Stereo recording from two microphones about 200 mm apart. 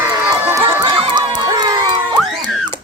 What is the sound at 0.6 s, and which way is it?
Crowd, 25° right (ahead or behind).